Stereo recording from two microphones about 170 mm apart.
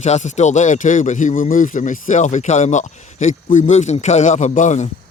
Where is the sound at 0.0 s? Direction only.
45° left (ahead or behind).